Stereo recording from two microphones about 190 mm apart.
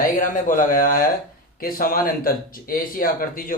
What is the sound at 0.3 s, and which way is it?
Speech, 45° left (ahead or behind).